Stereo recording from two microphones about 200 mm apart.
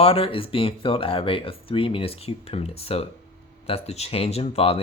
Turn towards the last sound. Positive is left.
turn(degrees=30)  # may be behind; listen again after turning